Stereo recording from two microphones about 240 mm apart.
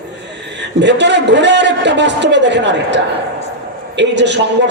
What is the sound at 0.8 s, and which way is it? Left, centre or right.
A man's voice, right.